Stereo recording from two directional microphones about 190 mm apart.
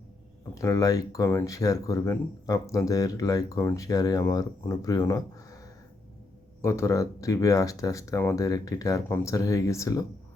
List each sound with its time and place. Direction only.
0.5 s speech: 15° left (ahead or behind)
6.6 s speech: 15° left (ahead or behind)